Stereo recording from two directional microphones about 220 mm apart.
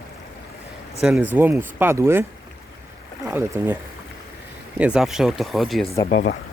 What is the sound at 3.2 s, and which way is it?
Speech, 10° right (ahead or behind).